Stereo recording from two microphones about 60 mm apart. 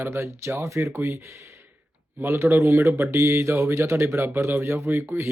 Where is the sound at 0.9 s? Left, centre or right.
Right.